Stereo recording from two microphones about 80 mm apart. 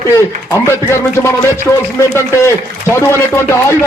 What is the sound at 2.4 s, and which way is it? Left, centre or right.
A man's voice, left.